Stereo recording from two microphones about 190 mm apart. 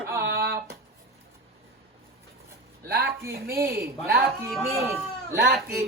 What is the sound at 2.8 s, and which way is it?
A woman's voice, 55° right (ahead or behind).